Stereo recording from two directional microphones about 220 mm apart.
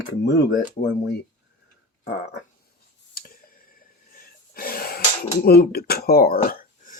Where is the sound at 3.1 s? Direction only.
40° left (ahead or behind).